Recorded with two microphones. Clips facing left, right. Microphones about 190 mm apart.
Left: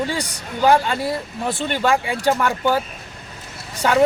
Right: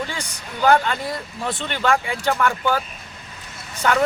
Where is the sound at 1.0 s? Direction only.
10° left (ahead or behind).